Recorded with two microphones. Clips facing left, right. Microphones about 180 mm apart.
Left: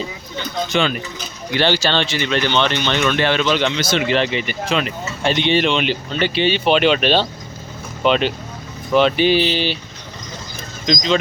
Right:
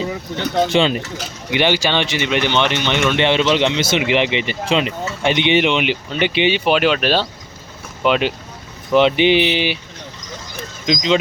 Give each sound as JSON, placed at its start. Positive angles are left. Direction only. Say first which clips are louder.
{"t": 0.1, "sound": "speech", "louder": "right 6 dB", "side_deg": -70}
{"t": 0.7, "sound": "speech", "louder": "right 3 dB", "side_deg": -25}
{"t": 1.1, "sound": "speech", "louder": "right 2 dB", "side_deg": -90}
{"t": 1.5, "sound": "speech", "louder": "right 1 dB", "side_deg": -15}
{"t": 3.2, "sound": "speech", "louder": "right 2 dB", "side_deg": -25}
{"t": 10.9, "sound": "speech", "louder": "even", "side_deg": -10}